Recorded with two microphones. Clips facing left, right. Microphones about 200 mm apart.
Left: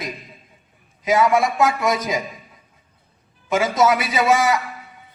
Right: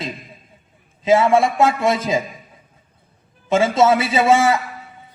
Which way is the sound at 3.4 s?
30° right (ahead or behind).